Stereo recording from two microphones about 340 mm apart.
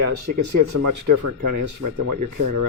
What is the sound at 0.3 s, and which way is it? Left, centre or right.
Speech, right.